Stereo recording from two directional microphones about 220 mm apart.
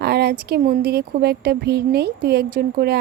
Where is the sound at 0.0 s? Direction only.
45° right (ahead or behind).